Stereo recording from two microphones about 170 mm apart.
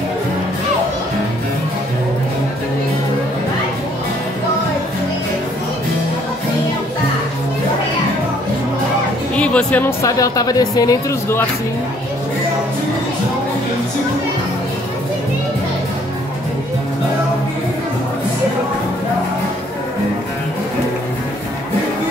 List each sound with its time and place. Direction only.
9.4 s speech: 5° left (ahead or behind)